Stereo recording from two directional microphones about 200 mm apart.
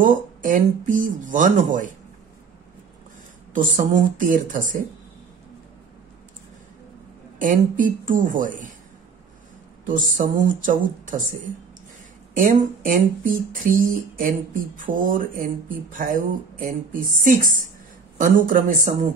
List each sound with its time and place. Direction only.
0.0 s speech: 40° right (ahead or behind)
3.5 s speech: 40° right (ahead or behind)
7.3 s speech: 40° right (ahead or behind)
9.8 s speech: 40° right (ahead or behind)
12.4 s speech: 45° right (ahead or behind)